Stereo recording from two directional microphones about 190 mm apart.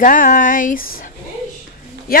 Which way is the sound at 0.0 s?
45° left (ahead or behind).